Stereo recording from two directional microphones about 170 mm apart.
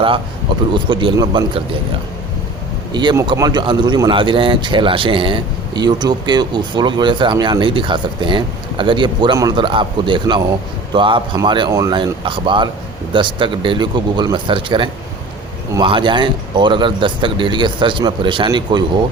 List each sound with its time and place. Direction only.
0.7 s speech: 30° right (ahead or behind)
2.9 s speech: 25° right (ahead or behind)